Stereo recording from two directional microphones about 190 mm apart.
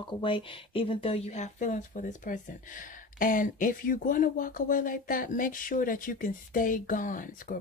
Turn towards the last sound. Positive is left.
turn(degrees=45)  # may be behind; listen again after turning